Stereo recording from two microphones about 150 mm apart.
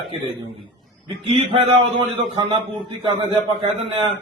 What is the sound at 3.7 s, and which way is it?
Speech, 35° right (ahead or behind).